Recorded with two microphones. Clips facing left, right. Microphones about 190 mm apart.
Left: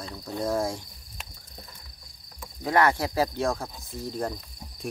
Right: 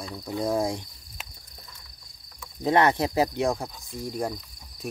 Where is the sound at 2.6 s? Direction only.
20° right (ahead or behind).